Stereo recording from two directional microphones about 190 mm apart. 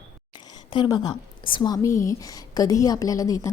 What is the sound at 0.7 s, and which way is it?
A woman's voice, 25° left (ahead or behind).